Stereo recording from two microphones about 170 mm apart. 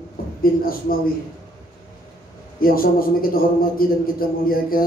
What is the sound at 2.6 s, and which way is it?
A man's voice, 60° left (ahead or behind).